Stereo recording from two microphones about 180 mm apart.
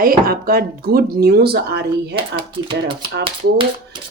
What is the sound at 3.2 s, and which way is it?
Speech, 30° right (ahead or behind).